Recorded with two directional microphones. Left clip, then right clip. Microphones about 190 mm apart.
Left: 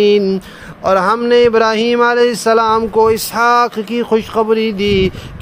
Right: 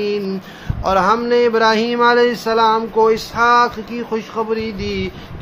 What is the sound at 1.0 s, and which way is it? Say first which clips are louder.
Speech: left 5 dB; 40° left (ahead or behind).